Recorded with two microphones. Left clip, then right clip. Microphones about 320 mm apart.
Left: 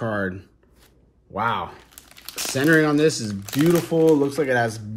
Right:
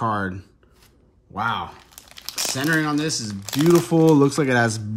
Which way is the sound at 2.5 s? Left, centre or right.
Centre.